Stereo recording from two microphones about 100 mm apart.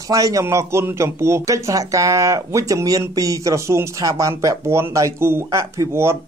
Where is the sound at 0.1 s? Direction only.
35° right (ahead or behind).